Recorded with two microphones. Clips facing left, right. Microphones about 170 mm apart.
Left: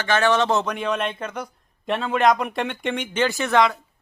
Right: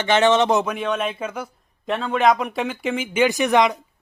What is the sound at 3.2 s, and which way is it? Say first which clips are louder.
Speech: right 2 dB; 15° right (ahead or behind).